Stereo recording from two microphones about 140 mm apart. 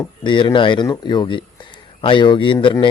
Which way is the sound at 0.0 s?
35° left (ahead or behind).